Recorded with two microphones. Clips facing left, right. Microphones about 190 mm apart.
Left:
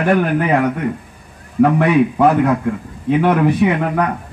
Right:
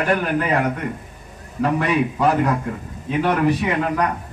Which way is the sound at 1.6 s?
60° left (ahead or behind).